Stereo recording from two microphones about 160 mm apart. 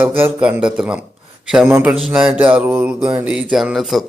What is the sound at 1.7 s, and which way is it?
Speech, 15° right (ahead or behind).